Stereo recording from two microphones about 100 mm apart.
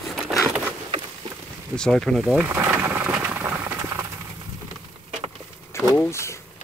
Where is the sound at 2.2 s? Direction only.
15° right (ahead or behind).